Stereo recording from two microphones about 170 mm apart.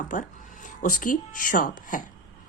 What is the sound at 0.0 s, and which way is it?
Speech, 50° left (ahead or behind).